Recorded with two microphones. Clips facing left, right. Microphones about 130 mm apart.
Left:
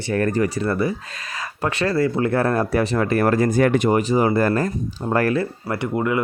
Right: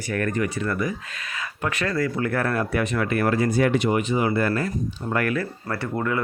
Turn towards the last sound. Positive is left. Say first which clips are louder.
# left 4 dB
turn(degrees=15)  # may be behind; listen again after turning